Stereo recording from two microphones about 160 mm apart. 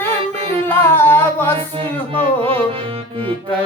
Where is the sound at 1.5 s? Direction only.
35° right (ahead or behind).